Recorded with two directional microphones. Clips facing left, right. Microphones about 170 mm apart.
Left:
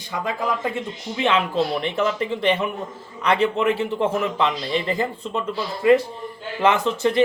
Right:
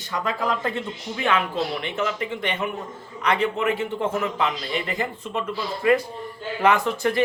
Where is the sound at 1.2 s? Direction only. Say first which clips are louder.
Left 3 dB; 25° left (ahead or behind).